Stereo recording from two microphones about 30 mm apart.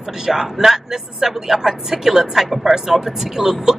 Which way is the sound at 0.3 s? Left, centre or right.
Centre.